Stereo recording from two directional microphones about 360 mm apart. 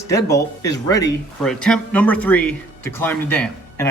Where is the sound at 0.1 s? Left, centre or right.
Centre.